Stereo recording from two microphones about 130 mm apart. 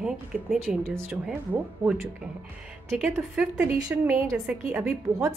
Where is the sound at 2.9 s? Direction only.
Centre (ahead or behind).